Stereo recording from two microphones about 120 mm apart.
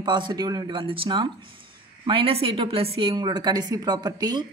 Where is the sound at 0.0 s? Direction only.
40° right (ahead or behind).